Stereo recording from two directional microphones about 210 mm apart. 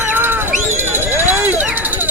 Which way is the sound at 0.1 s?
10° right (ahead or behind).